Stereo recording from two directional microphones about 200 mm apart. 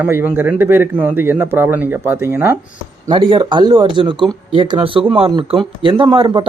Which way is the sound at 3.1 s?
25° right (ahead or behind).